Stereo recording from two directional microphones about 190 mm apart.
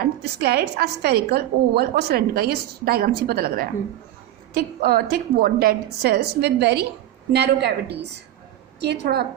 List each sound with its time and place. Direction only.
0.0 s a woman's voice: 55° right (ahead or behind)